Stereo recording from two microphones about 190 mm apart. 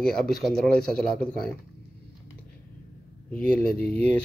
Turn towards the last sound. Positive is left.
turn(degrees=10)  # may be behind; listen again after turning